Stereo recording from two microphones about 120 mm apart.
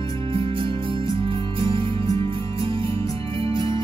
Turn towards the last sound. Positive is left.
turn(degrees=-45)  # may be behind; listen again after turning